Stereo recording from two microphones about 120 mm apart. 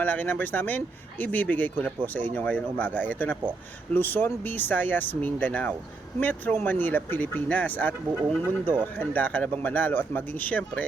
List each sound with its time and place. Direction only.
0.0 s speech: 15° left (ahead or behind)